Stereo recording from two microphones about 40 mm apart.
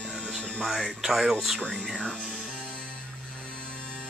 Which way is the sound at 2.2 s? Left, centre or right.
Centre.